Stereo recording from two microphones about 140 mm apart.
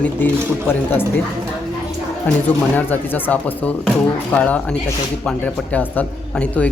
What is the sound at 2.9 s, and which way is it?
A man's voice, 10° left (ahead or behind).